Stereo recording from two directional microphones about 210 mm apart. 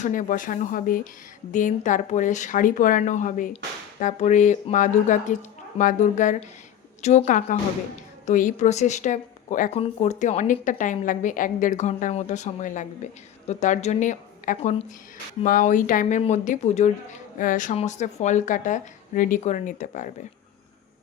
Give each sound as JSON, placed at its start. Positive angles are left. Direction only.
{"t": 0.0, "sound": "a woman's voice", "side_deg": 40}